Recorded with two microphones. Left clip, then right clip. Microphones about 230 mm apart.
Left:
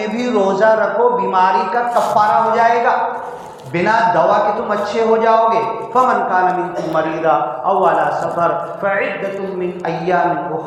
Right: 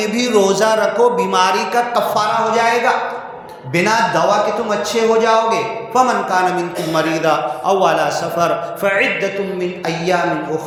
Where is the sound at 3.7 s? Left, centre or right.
Right.